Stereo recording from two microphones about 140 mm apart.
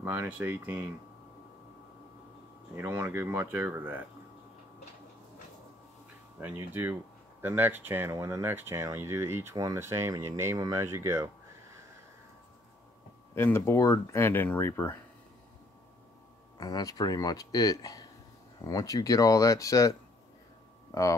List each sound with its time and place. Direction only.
0.0 s speech: 15° right (ahead or behind)
2.7 s speech: 15° right (ahead or behind)
6.4 s speech: 15° right (ahead or behind)
13.3 s speech: 15° left (ahead or behind)
16.5 s speech: 25° left (ahead or behind)